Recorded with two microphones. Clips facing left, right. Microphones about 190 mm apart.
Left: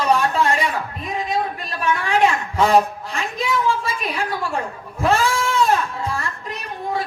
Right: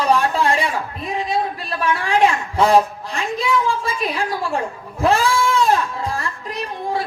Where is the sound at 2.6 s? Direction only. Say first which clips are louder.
Right 1 dB; 35° right (ahead or behind).